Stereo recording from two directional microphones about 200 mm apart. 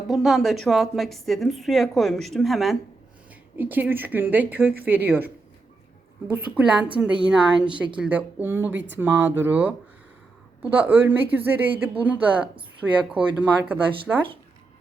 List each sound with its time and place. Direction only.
0.1 s a woman's voice: centre (ahead or behind)
8.7 s speech: 65° right (ahead or behind)
9.0 s speech: 10° right (ahead or behind)